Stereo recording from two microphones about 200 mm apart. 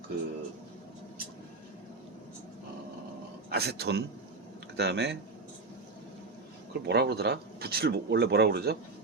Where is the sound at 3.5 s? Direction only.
55° right (ahead or behind).